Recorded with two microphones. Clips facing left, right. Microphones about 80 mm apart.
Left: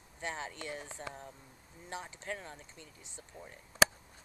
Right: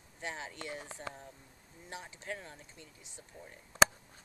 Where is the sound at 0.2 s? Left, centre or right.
Centre.